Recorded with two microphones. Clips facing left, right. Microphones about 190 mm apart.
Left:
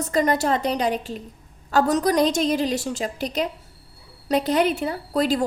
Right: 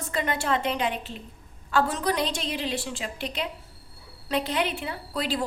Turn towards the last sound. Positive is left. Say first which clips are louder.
# left 7 dB
turn(degrees=45)  # may be behind; listen again after turning